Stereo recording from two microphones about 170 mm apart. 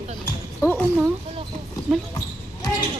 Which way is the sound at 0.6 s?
10° left (ahead or behind).